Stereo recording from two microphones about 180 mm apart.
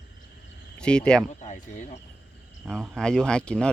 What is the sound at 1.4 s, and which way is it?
Speech, 40° left (ahead or behind).